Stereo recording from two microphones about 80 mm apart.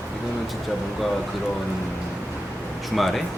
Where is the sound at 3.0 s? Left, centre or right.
Centre.